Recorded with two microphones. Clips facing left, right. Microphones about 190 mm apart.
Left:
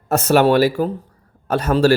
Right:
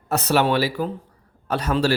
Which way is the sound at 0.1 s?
45° left (ahead or behind).